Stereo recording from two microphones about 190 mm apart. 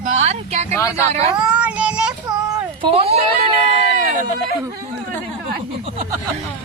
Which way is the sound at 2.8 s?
30° right (ahead or behind).